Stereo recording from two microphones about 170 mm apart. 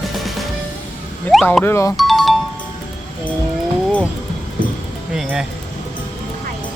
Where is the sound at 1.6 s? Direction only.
15° left (ahead or behind).